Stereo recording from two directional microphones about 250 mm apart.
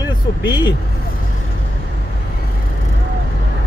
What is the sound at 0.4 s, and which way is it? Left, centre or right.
Speech, centre.